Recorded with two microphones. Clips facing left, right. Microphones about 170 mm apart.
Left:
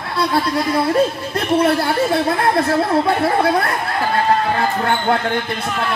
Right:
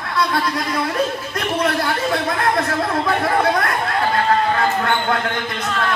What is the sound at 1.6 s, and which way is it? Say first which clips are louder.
Speech: left 4 dB; 30° left (ahead or behind).